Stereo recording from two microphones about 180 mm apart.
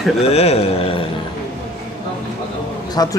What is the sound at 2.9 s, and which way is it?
Speech, 20° left (ahead or behind).